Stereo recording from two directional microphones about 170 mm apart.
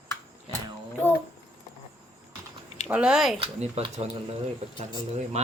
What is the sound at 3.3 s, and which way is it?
Speech, 30° right (ahead or behind).